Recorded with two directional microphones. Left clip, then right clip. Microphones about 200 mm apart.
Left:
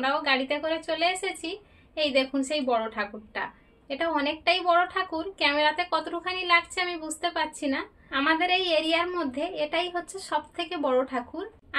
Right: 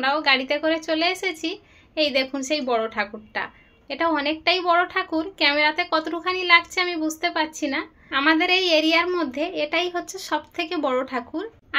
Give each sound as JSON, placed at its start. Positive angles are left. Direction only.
{"t": 0.0, "sound": "a woman's voice", "side_deg": -35}